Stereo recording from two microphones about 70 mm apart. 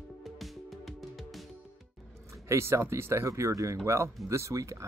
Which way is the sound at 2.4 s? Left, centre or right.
Right.